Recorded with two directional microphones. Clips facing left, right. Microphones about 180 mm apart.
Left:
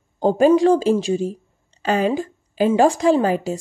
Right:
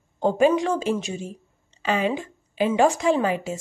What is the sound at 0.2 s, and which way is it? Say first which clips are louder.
A woman's voice: left 5 dB; 35° left (ahead or behind).